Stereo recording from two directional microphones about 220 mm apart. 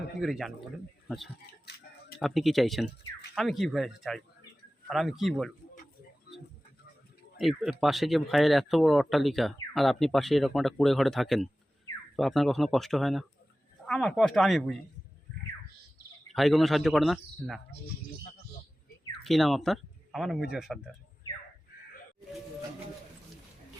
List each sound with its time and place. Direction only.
0.2 s speech: centre (ahead or behind)
6.3 s a sound: 45° left (ahead or behind)
7.3 s speech: centre (ahead or behind)
16.3 s speech: centre (ahead or behind)
19.2 s speech: centre (ahead or behind)